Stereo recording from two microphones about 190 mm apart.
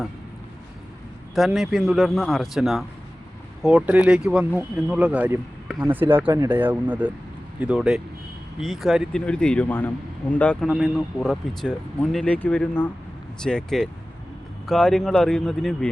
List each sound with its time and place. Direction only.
1.4 s a man's voice: centre (ahead or behind)